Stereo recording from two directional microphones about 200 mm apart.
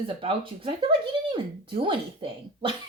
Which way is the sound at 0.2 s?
25° right (ahead or behind).